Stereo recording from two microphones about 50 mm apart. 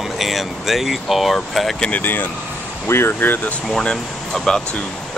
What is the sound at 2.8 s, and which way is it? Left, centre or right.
Speech, left.